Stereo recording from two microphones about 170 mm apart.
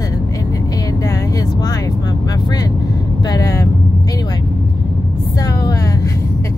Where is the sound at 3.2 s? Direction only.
20° left (ahead or behind).